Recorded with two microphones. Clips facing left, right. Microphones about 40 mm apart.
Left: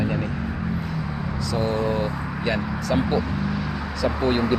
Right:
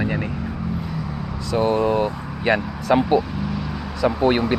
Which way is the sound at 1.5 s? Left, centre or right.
Right.